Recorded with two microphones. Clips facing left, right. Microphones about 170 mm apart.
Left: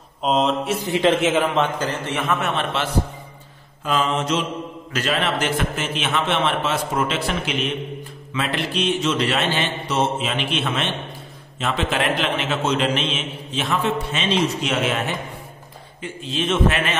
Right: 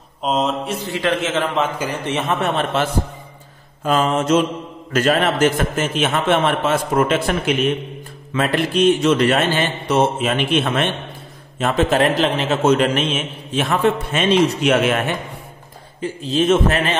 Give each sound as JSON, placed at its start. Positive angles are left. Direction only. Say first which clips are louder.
{"t": 0.2, "sound": "mantra", "louder": "even", "side_deg": 0}
{"t": 0.8, "sound": "a man's voice", "louder": "left 3 dB", "side_deg": 20}
{"t": 1.5, "sound": "mantra", "louder": "even", "side_deg": 0}
{"t": 1.9, "sound": "a man's voice", "louder": "right 2 dB", "side_deg": -20}
{"t": 2.4, "sound": "a man's voice", "louder": "right 4 dB", "side_deg": -45}
{"t": 16.0, "sound": "a man's voice", "louder": "right 7 dB", "side_deg": -40}